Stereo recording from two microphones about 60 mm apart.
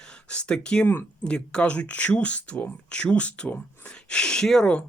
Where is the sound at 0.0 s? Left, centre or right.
Centre.